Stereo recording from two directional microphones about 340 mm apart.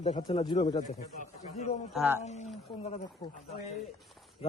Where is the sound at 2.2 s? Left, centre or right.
Centre.